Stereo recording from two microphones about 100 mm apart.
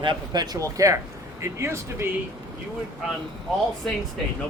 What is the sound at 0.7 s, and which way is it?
Speech, 30° right (ahead or behind).